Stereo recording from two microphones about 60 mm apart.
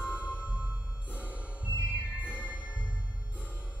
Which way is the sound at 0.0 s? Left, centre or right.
Right.